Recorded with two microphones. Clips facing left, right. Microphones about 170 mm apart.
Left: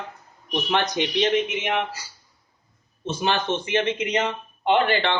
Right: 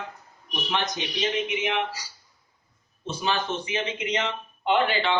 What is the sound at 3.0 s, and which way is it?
Speech, 65° left (ahead or behind).